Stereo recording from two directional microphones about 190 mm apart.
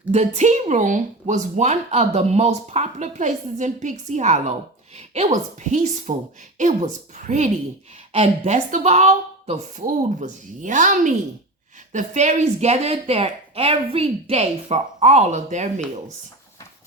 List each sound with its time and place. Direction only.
0.1 s speech: 35° right (ahead or behind)